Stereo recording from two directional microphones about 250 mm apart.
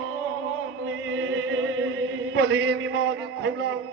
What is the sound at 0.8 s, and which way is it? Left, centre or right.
Music, right.